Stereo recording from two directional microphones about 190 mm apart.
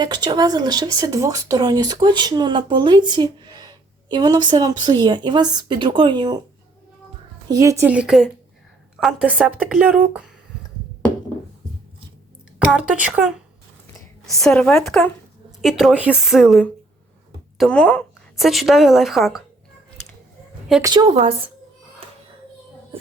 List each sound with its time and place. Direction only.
0.0 s speech: 20° right (ahead or behind)
7.4 s a woman's voice: 15° right (ahead or behind)
12.5 s speech: 5° right (ahead or behind)
14.4 s a woman's voice: centre (ahead or behind)
20.8 s speech: 20° right (ahead or behind)
22.0 s music: 30° right (ahead or behind)